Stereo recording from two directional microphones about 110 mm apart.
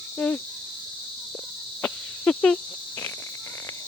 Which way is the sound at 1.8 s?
10° left (ahead or behind).